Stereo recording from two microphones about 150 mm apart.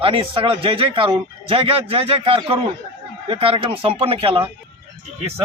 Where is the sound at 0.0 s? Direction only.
40° right (ahead or behind).